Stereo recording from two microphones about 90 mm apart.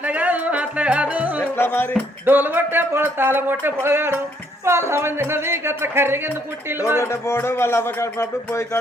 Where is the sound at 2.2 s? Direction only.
20° right (ahead or behind).